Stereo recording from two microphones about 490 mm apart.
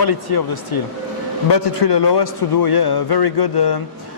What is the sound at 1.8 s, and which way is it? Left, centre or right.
Speech, left.